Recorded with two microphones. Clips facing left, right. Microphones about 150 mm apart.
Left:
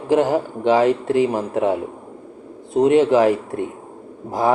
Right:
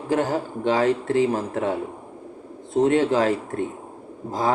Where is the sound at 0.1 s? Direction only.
15° left (ahead or behind).